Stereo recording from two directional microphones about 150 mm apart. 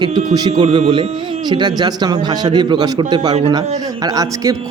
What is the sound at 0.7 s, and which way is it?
A man's voice, 40° right (ahead or behind).